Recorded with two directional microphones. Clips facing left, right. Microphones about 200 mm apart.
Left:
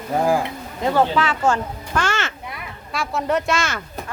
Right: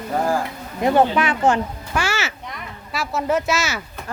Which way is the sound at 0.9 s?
15° right (ahead or behind).